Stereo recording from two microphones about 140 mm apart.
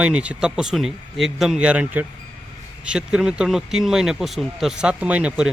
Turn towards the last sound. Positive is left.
turn(degrees=-5)  # may be behind; listen again after turning